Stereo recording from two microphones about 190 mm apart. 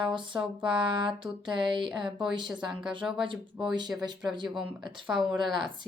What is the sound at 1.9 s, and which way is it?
Speech, centre (ahead or behind).